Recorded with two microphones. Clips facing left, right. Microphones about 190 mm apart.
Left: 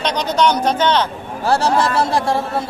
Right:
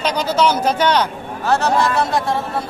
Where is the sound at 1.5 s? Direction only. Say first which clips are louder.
Left 1 dB; 30° left (ahead or behind).